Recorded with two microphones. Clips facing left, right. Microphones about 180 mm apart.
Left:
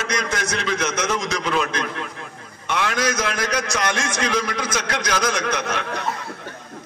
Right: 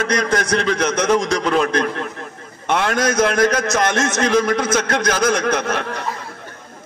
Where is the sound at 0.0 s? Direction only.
55° right (ahead or behind).